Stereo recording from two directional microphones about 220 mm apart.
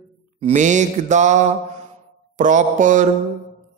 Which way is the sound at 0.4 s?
35° right (ahead or behind).